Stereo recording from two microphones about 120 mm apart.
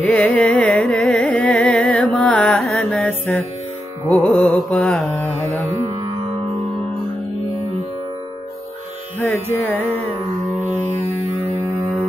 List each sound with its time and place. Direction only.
0.0 s carnatic music: 10° left (ahead or behind)
4.1 s music: 5° left (ahead or behind)
5.7 s music: 30° right (ahead or behind)
9.2 s music: 20° left (ahead or behind)